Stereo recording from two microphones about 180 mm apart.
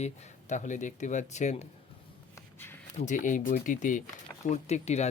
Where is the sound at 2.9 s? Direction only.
45° left (ahead or behind).